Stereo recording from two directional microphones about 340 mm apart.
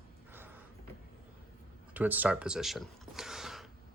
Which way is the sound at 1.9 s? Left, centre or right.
Centre.